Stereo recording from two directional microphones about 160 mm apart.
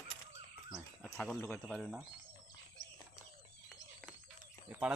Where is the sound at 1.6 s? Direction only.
5° right (ahead or behind).